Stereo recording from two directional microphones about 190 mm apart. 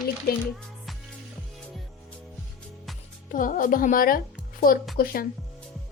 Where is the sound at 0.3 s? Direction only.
55° left (ahead or behind).